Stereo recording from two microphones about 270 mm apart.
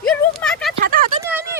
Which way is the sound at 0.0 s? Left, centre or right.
Centre.